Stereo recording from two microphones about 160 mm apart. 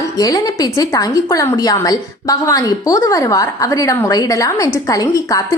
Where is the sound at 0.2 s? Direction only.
25° left (ahead or behind).